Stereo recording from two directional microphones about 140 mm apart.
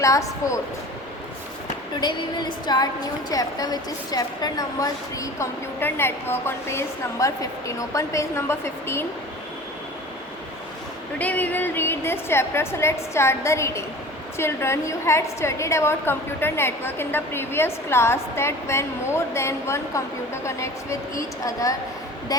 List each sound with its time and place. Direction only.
0.0 s a woman's voice: 20° left (ahead or behind)
2.0 s a woman's voice: 30° left (ahead or behind)
11.2 s a woman's voice: 10° left (ahead or behind); by 22.5 s 25° left (ahead or behind)